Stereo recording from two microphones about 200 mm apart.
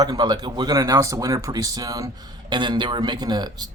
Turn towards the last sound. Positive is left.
turn(degrees=-20)  # may be behind; listen again after turning